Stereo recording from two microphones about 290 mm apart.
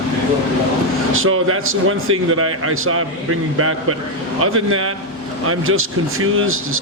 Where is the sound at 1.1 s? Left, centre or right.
Right.